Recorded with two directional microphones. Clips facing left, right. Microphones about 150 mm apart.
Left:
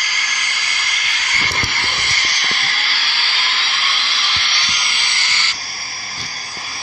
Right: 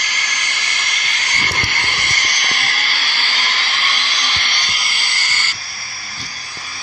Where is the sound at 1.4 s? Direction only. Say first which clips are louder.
Right 1 dB; 50° right (ahead or behind).